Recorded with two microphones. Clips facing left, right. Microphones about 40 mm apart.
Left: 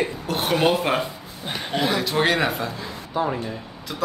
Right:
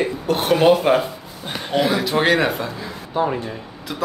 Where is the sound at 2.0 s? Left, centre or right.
Centre.